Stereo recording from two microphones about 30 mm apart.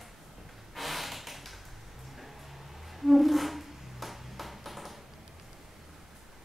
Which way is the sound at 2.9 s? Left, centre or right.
Centre.